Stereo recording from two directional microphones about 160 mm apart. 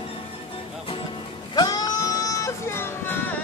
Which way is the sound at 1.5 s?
25° left (ahead or behind).